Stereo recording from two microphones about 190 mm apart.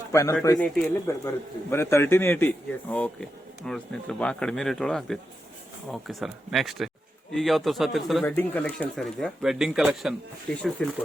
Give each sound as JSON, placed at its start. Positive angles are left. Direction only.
{"t": 0.1, "sound": "speech", "side_deg": 15}
{"t": 8.2, "sound": "speech", "side_deg": 10}